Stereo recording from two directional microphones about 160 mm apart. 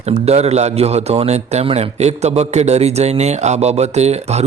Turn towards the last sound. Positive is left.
turn(degrees=-45)  # may be behind; listen again after turning